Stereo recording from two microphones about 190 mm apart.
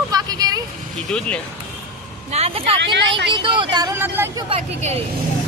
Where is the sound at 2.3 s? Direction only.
30° right (ahead or behind); by 4.4 s 10° right (ahead or behind).